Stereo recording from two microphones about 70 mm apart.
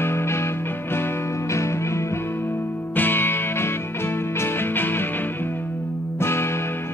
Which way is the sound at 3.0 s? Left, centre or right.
Left.